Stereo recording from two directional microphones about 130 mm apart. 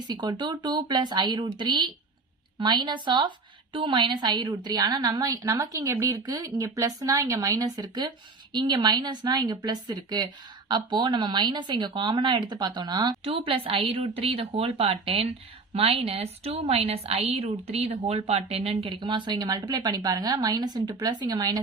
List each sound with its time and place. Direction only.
0.1 s a woman's voice: 35° right (ahead or behind)
13.2 s a woman's voice: 45° right (ahead or behind)